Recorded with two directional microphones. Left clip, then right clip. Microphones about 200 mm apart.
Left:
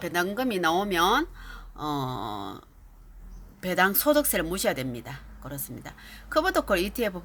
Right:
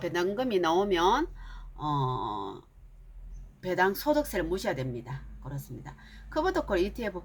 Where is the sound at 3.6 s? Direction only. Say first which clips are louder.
Left 3 dB; 40° left (ahead or behind).